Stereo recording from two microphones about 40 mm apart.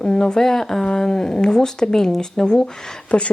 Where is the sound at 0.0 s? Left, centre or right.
Centre.